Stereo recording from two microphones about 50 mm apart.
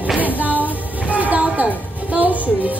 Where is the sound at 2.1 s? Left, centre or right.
Right.